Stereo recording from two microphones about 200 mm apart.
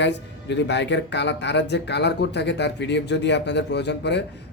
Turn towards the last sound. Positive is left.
turn(degrees=60)  # may be behind; listen again after turning